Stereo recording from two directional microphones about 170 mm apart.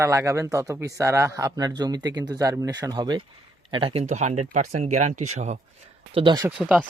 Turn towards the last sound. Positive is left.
turn(degrees=-5)  # may be behind; listen again after turning